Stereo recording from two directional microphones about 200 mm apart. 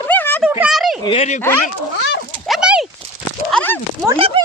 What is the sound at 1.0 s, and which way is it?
Speech, 30° left (ahead or behind).